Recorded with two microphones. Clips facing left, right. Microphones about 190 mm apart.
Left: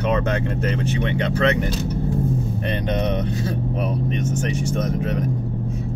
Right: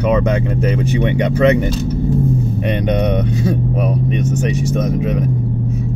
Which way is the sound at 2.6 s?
15° right (ahead or behind).